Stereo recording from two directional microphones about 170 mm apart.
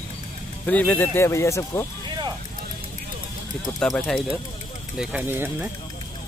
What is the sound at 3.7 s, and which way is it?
Speech, 5° left (ahead or behind).